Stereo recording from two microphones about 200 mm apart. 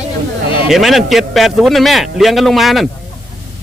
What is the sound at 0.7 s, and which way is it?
A man's voice, centre (ahead or behind).